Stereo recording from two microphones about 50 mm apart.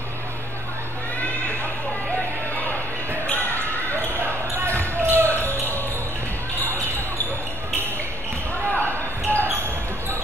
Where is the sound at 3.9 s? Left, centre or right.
Right.